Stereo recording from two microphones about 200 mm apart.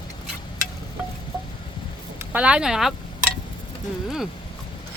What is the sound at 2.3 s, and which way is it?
Speech, 5° right (ahead or behind).